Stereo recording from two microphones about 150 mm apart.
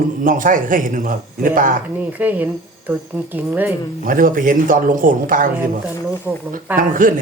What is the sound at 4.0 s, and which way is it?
A man's voice, 65° right (ahead or behind).